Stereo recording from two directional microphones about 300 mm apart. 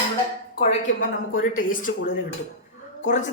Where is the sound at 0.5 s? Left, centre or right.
Left.